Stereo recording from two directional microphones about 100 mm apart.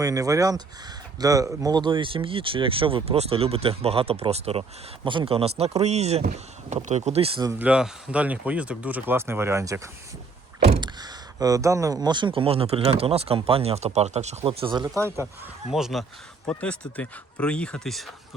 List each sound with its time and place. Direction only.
0.0 s speech: 35° right (ahead or behind); by 4.6 s 90° right
5.0 s speech: 60° right (ahead or behind); by 7.3 s 85° right
7.6 s speech: 10° right (ahead or behind); by 9.9 s 30° right (ahead or behind)
10.8 s speech: 45° right (ahead or behind)
14.8 s speech: 30° right (ahead or behind)
15.7 s speech: centre (ahead or behind)
16.5 s speech: 15° left (ahead or behind)